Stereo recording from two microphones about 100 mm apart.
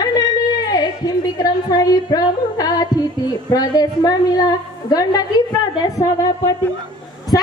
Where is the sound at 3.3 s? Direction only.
40° left (ahead or behind).